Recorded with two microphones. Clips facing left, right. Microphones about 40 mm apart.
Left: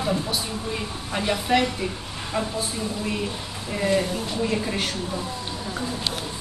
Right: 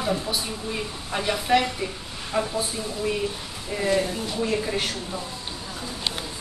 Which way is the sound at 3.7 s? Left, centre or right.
Centre.